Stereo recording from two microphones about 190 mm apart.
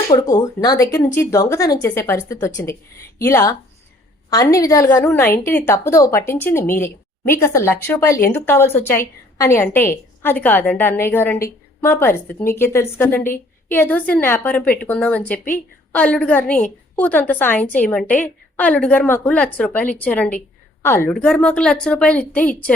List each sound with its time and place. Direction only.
0.1 s a woman's voice: 20° left (ahead or behind)